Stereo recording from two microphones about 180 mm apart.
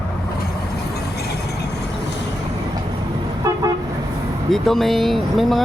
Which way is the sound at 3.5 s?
20° right (ahead or behind).